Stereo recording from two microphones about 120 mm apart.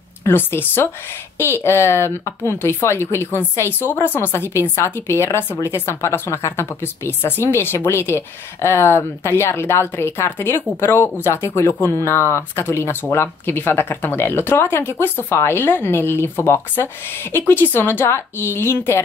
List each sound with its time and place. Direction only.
0.2 s speech: 20° left (ahead or behind)